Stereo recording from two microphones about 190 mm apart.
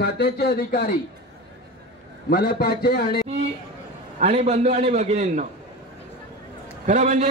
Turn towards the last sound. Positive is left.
turn(degrees=-40)  # may be behind; listen again after turning